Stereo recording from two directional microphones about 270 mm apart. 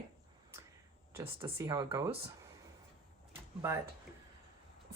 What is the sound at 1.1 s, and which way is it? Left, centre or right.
Speech, centre.